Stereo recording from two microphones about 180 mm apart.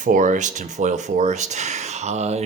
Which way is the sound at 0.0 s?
45° right (ahead or behind).